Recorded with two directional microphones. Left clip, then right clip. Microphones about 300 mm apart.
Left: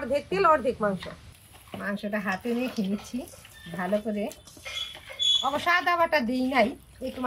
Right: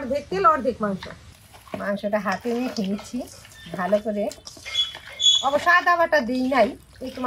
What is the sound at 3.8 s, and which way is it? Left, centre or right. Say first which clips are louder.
Speech: right 6 dB; centre.